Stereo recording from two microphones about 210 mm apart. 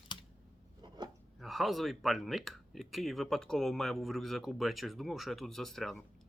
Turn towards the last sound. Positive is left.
turn(degrees=0)  # may be behind; listen again after turning